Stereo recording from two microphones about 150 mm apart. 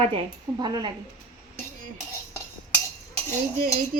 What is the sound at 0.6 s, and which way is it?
Speech, 30° right (ahead or behind).